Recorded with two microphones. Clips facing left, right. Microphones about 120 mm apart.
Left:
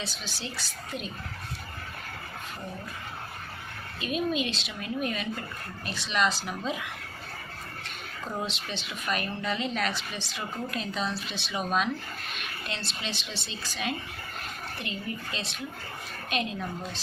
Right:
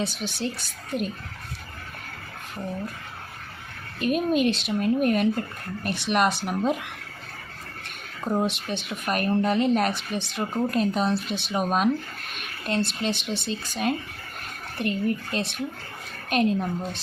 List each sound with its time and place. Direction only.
0.0 s speech: 55° right (ahead or behind)
4.0 s speech: 50° right (ahead or behind)
8.4 s speech: 55° right (ahead or behind)